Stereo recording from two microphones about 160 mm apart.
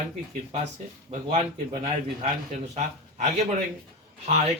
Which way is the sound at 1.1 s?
40° right (ahead or behind).